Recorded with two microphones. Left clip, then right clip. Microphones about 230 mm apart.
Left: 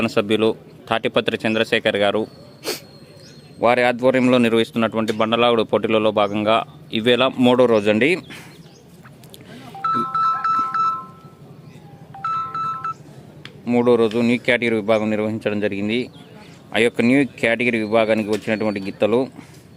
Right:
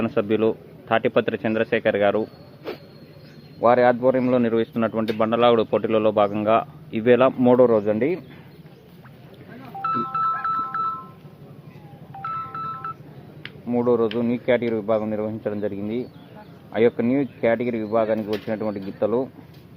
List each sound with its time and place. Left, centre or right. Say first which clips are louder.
0.0 s speech: left 3 dB; centre
3.6 s speech: even; left
9.8 s music: left 4 dB; left
12.2 s music: left 6 dB; left
13.7 s speech: left 4 dB; left